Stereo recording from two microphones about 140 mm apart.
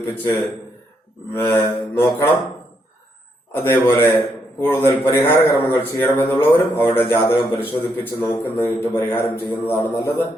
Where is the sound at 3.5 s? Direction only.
15° left (ahead or behind).